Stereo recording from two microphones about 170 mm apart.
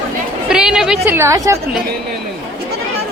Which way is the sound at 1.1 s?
15° right (ahead or behind).